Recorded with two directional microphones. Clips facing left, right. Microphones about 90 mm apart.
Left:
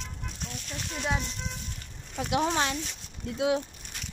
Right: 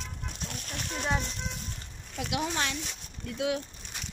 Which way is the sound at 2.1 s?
35° left (ahead or behind).